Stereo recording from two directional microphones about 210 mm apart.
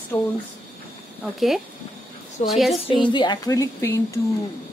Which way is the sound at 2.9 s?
20° left (ahead or behind).